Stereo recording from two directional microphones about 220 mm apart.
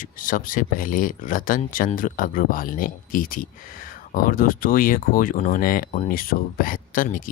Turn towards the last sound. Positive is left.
turn(degrees=40)  # may be behind; listen again after turning